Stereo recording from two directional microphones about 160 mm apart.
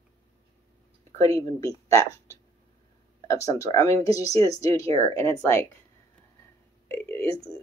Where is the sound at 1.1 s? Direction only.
20° left (ahead or behind).